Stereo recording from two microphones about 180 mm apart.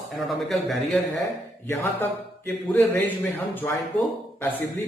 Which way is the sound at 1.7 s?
15° left (ahead or behind).